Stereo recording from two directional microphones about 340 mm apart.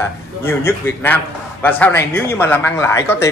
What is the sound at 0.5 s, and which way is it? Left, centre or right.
A man's voice, centre.